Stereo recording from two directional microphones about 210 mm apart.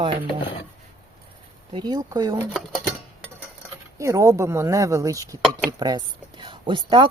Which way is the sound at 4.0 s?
15° right (ahead or behind).